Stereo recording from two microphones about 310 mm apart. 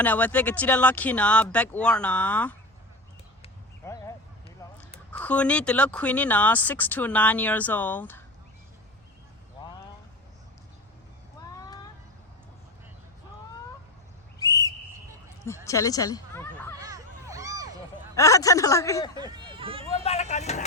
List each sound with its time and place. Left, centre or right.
0.0 s speech: centre
3.4 s a sound: centre
4.6 s crow: centre
5.1 s speech: centre
14.3 s whistle: centre
15.6 s snicker: centre
16.7 s a sound: centre
18.1 s speech: centre
19.1 s hubbub: centre
20.1 s speech: left